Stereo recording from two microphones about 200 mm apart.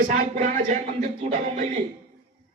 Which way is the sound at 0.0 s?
45° right (ahead or behind).